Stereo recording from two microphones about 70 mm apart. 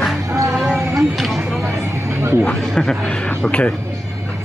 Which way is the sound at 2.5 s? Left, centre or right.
Centre.